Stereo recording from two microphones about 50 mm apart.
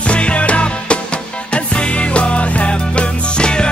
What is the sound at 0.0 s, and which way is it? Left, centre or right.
Music, left.